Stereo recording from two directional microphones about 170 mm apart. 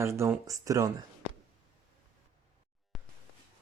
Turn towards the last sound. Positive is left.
turn(degrees=0)  # may be behind; listen again after turning